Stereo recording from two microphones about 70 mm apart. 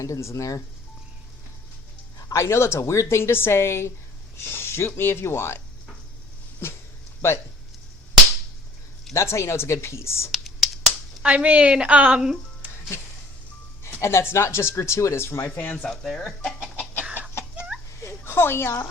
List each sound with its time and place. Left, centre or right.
0.0 s speech: left
2.3 s speech: left
9.1 s speech: left
10.3 s finger snapping: centre
11.2 s speech: centre
12.6 s music: right
14.0 s speech: left
15.5 s speech: left
15.8 s speech: centre
17.0 s chicken: right
18.0 s a sound: left